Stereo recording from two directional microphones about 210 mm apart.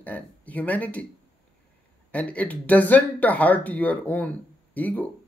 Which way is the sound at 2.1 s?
5° left (ahead or behind).